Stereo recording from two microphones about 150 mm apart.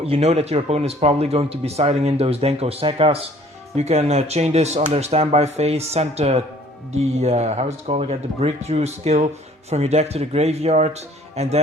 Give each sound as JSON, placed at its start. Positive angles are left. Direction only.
{"t": 0.0, "sound": "speech", "side_deg": -45}